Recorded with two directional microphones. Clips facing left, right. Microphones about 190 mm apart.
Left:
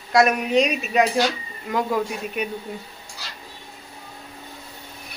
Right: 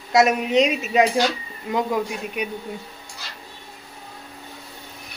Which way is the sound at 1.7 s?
15° right (ahead or behind).